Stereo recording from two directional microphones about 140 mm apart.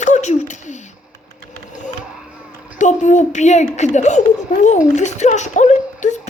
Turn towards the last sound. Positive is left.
turn(degrees=60)  # may be behind; listen again after turning